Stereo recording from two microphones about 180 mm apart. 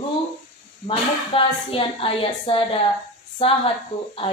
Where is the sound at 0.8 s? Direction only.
30° left (ahead or behind).